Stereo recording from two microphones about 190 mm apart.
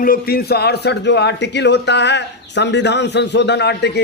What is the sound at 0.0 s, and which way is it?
A man's voice, 50° left (ahead or behind).